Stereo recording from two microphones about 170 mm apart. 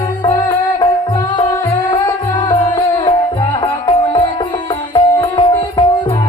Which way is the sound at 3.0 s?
30° left (ahead or behind).